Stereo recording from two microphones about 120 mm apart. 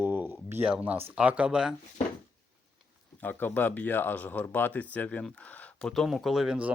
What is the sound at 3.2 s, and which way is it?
Speech, 15° left (ahead or behind).